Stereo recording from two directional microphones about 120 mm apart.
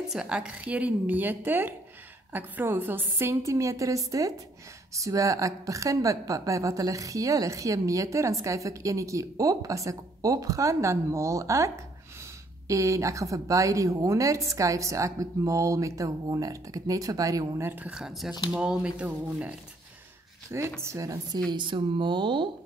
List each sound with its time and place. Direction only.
0.1 s a woman's voice: 5° right (ahead or behind)
20.5 s a woman's voice: 20° right (ahead or behind)
21.5 s speech: 40° right (ahead or behind)